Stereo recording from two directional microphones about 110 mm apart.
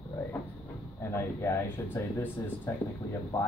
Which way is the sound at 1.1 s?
25° left (ahead or behind).